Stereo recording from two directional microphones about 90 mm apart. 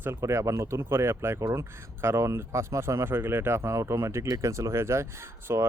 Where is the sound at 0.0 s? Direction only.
30° right (ahead or behind).